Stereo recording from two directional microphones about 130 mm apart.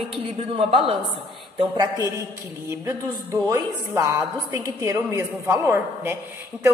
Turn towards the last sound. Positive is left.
turn(degrees=-20)  # may be behind; listen again after turning